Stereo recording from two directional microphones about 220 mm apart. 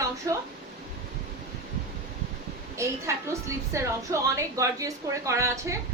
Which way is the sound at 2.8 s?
15° right (ahead or behind).